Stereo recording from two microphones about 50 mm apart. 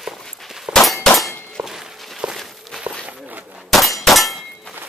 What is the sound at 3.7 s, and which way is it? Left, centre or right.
Clang, centre.